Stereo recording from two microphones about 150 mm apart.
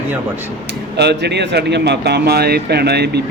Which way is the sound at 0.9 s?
90° right.